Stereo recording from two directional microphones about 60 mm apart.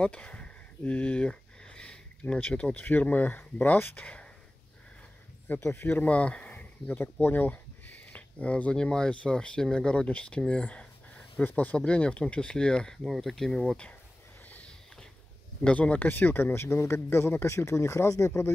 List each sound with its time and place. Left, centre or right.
0.0 s speech: left
4.0 s speech: left
5.6 s speech: left
5.9 s speech: left
13.0 s speech: centre
15.6 s speech: left